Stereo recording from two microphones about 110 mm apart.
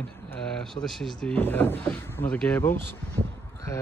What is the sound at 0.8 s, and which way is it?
Speech, 5° left (ahead or behind).